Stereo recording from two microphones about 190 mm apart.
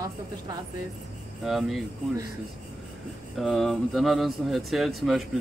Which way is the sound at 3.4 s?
Centre (ahead or behind).